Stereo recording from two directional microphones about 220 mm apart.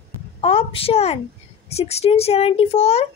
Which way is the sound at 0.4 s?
25° left (ahead or behind).